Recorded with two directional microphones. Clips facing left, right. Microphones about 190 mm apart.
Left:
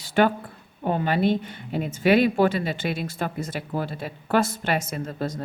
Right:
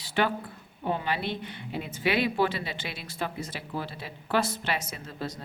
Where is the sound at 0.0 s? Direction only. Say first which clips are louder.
Left 7 dB; 45° left (ahead or behind).